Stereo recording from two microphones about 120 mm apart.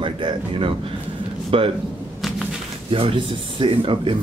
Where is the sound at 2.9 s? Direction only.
50° right (ahead or behind).